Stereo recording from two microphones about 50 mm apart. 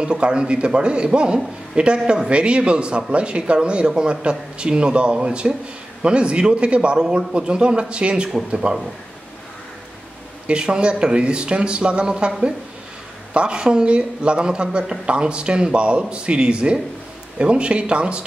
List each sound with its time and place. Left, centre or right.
0.0 s speech: centre
10.4 s speech: centre